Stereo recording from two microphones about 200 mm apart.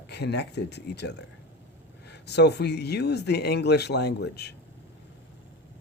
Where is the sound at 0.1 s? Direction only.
55° left (ahead or behind).